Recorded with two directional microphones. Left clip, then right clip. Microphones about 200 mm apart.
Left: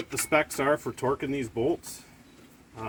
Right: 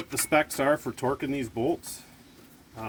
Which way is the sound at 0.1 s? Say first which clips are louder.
Right 1 dB; 45° right (ahead or behind).